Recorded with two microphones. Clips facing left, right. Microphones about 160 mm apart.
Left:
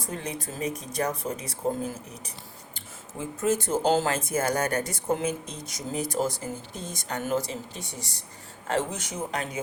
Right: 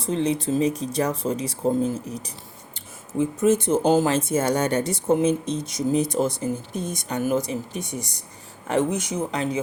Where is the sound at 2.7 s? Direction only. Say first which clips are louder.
Right 13 dB; 20° right (ahead or behind).